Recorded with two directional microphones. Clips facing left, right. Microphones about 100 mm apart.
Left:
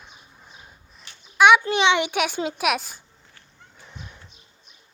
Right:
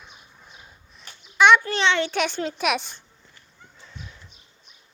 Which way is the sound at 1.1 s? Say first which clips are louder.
Right 3 dB; 45° right (ahead or behind).